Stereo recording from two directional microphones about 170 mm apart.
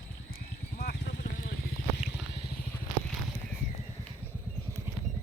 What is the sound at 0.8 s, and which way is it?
Horse, 65° left (ahead or behind).